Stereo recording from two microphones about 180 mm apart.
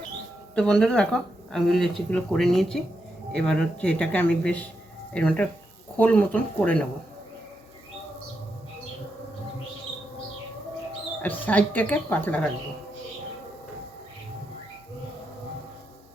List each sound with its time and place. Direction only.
0.5 s speech: 5° left (ahead or behind)
11.2 s speech: 10° left (ahead or behind)